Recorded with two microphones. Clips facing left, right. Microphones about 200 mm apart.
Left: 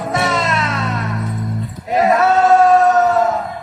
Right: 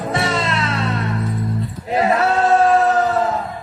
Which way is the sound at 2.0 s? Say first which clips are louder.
Left 4 dB; 30° right (ahead or behind).